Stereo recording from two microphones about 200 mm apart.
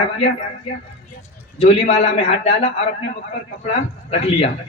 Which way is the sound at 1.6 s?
35° left (ahead or behind).